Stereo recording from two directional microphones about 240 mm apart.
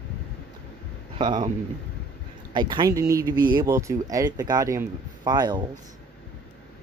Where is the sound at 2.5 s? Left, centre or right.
Centre.